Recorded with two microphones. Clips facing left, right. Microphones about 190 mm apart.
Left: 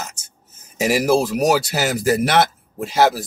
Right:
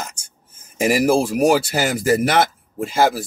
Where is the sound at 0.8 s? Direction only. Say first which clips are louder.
Right 1 dB; 50° right (ahead or behind).